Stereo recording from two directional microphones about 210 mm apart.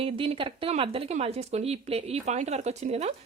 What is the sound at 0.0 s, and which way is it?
Speech, 25° right (ahead or behind).